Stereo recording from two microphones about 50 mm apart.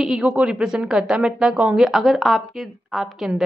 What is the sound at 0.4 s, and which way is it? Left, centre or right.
Speech, centre.